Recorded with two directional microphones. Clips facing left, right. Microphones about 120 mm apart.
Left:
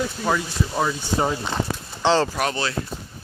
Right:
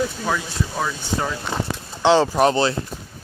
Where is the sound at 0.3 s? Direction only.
10° left (ahead or behind).